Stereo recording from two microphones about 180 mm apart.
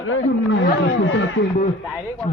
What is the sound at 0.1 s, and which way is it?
Speech, 90° left.